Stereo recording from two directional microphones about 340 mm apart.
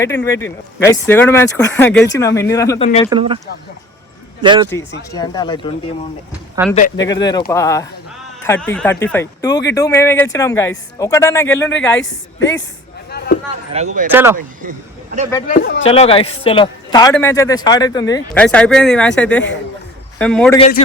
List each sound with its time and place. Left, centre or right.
0.0 s a man's voice: centre
3.1 s a man's voice: centre
5.1 s a man's voice: centre
6.3 s speech: centre
7.1 s a man's voice: centre
13.1 s a sound: left
13.7 s speech: centre
14.1 s speech: centre
14.3 s speech: right
15.4 s speech: left
15.9 s a man's voice: centre